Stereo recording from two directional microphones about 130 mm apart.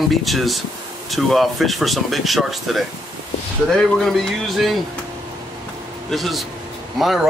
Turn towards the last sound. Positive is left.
turn(degrees=0)  # may be behind; listen again after turning